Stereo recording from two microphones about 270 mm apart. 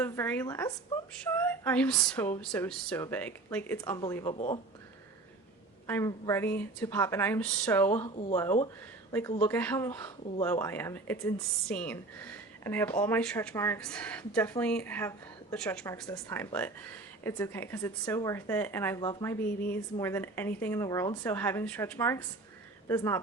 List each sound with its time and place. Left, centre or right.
0.0 s speech: centre; by 4.6 s left
5.9 s speech: centre
7.9 s speech: left
9.4 s speech: centre